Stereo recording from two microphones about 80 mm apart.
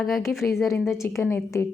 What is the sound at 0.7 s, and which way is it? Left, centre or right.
A woman's voice, left.